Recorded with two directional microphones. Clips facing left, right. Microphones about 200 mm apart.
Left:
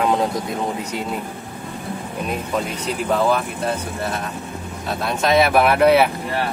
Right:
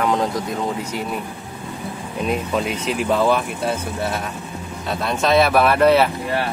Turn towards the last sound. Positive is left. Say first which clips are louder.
# even
turn(degrees=10)  # may be behind; listen again after turning